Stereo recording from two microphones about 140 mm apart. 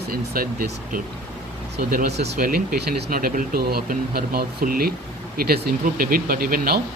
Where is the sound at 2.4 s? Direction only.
90° right.